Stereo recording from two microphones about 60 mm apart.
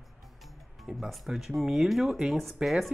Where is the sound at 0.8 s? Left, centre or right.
Centre.